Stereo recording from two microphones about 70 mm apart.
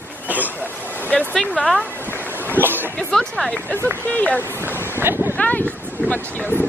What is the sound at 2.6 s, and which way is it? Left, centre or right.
Speech, right.